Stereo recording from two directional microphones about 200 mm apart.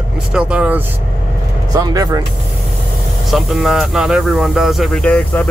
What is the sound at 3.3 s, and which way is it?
Speech, centre (ahead or behind).